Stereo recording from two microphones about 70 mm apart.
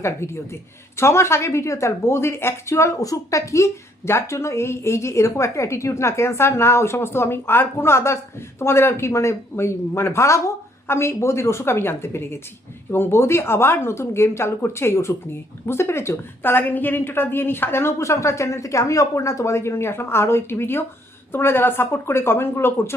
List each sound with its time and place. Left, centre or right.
0.0 s a woman's voice: left